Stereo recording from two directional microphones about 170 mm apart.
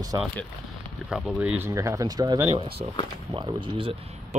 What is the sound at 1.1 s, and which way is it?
Speech, 5° right (ahead or behind).